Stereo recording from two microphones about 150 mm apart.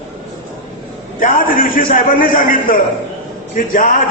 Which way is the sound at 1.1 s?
65° left (ahead or behind).